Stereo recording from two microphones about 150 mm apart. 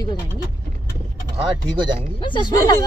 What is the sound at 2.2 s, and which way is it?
Speech, 30° left (ahead or behind).